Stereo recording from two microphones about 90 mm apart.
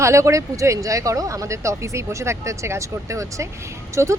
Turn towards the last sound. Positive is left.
turn(degrees=-35)  # may be behind; listen again after turning